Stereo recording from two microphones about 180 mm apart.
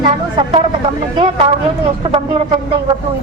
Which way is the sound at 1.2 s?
30° right (ahead or behind).